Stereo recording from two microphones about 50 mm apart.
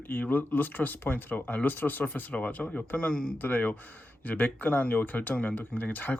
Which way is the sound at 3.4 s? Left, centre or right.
Left.